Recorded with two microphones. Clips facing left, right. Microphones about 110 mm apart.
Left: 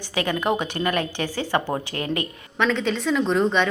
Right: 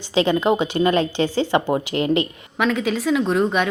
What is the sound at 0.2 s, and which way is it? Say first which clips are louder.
Speech: right 5 dB; 20° right (ahead or behind).